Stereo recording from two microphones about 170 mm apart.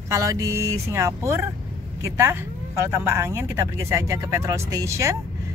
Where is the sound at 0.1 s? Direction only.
20° right (ahead or behind).